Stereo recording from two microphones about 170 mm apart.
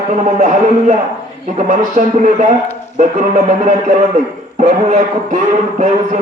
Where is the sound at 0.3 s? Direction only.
45° right (ahead or behind).